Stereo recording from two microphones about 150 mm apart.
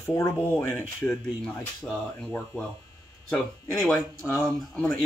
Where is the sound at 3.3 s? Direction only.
5° left (ahead or behind).